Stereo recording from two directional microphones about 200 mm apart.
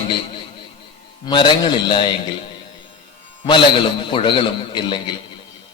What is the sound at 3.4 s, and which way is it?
A man's voice, 25° left (ahead or behind).